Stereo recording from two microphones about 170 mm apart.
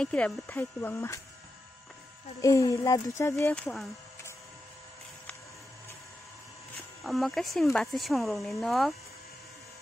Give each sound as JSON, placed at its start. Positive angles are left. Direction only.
{"t": 0.0, "sound": "speech", "side_deg": 5}
{"t": 2.4, "sound": "speech", "side_deg": 20}
{"t": 3.5, "sound": "speech", "side_deg": 5}
{"t": 7.0, "sound": "speech", "side_deg": 0}